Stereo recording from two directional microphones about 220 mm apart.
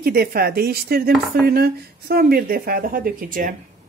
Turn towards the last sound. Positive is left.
turn(degrees=-40)  # may be behind; listen again after turning